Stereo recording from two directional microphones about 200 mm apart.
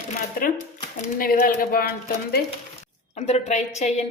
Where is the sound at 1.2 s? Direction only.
45° left (ahead or behind).